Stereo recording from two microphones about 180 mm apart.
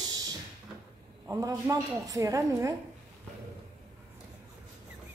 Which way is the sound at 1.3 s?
15° right (ahead or behind).